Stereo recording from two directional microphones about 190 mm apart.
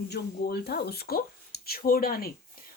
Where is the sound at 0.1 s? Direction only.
55° left (ahead or behind).